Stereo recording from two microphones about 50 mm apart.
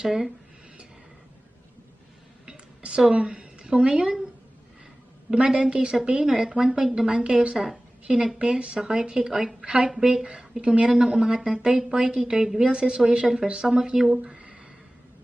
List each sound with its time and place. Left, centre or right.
0.0 s a woman's voice: centre
2.5 s a sound: centre
5.3 s speech: centre
6.7 s a woman's voice: centre
7.5 s a woman's voice: centre